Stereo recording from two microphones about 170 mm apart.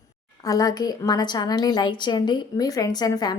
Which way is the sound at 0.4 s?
20° left (ahead or behind).